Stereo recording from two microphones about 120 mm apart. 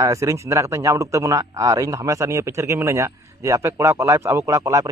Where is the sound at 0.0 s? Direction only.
25° right (ahead or behind).